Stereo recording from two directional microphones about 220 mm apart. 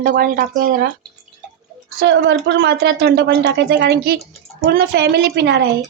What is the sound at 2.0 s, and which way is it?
A woman's voice, 55° right (ahead or behind).